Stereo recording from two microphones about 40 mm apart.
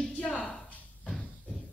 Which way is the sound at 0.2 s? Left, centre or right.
Centre.